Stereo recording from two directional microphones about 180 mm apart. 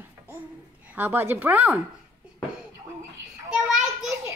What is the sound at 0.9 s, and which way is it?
Speech, 10° right (ahead or behind).